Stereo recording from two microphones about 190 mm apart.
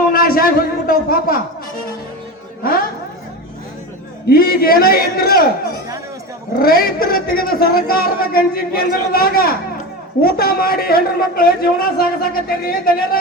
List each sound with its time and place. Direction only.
0.1 s a sound: 50° left (ahead or behind)
4.3 s a man's voice: 50° left (ahead or behind)
6.6 s a man's voice: 50° left (ahead or behind)